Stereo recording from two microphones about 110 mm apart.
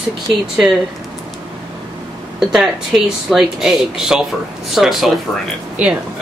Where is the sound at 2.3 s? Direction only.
5° right (ahead or behind).